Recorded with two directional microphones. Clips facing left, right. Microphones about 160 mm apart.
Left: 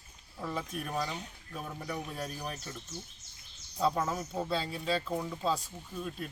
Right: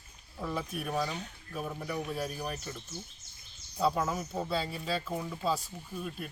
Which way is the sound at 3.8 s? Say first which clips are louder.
Right 1 dB; 5° right (ahead or behind).